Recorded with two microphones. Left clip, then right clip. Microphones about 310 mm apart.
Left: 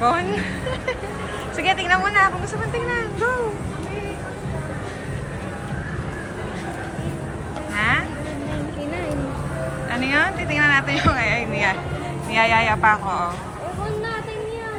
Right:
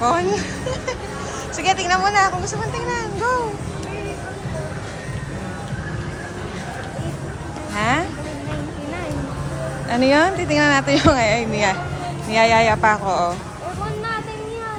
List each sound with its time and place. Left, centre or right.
0.0 s a woman's voice: centre
7.8 s music: centre
9.9 s a woman's voice: centre